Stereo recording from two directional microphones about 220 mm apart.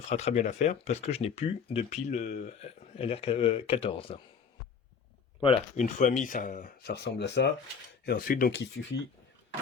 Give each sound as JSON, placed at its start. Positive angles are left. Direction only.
{"t": 0.1, "sound": "speech", "side_deg": 30}
{"t": 5.4, "sound": "speech", "side_deg": 30}